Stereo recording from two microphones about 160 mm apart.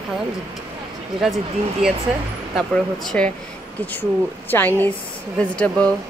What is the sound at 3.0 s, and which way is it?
Speech, 5° left (ahead or behind).